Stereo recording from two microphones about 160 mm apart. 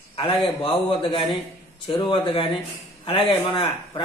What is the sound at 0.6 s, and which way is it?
Speech, 30° left (ahead or behind).